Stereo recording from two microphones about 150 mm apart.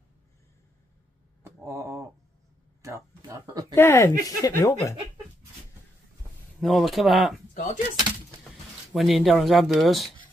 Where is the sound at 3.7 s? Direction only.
15° left (ahead or behind).